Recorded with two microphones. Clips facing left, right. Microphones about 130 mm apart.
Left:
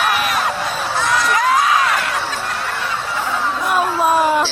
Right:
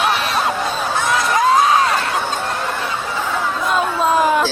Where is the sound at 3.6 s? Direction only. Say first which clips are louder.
Left 1 dB; 10° left (ahead or behind).